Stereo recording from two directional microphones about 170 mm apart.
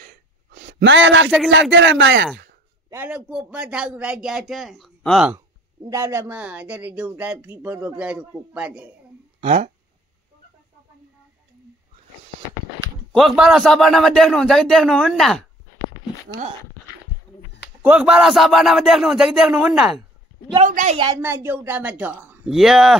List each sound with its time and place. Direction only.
0.0 s a sound: 65° right (ahead or behind); by 1.3 s 90° right
1.5 s a man's voice: 90° right
2.9 s a man's voice: 10° right (ahead or behind)
5.9 s a woman's voice: 15° right (ahead or behind)
9.4 s speech: 40° right (ahead or behind)
13.1 s a man's voice: centre (ahead or behind)
17.8 s a man's voice: 5° right (ahead or behind)
20.6 s a woman's voice: 50° right (ahead or behind)
21.0 s a woman's voice: 15° right (ahead or behind); by 22.9 s centre (ahead or behind)